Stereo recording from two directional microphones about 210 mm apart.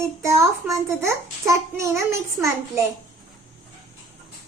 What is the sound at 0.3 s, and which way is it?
A child's voice, 15° right (ahead or behind).